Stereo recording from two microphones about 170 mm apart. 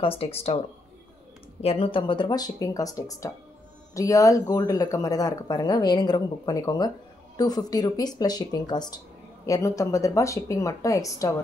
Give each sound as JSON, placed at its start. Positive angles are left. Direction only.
{"t": 0.0, "sound": "speech", "side_deg": 35}
{"t": 1.6, "sound": "speech", "side_deg": 35}